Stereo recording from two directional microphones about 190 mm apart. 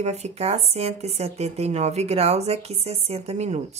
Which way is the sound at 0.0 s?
35° right (ahead or behind).